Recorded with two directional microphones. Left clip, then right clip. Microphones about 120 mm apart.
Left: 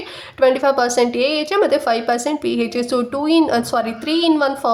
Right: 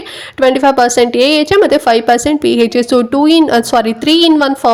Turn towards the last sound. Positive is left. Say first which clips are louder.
# right 7 dB
turn(degrees=-50)  # may be behind; listen again after turning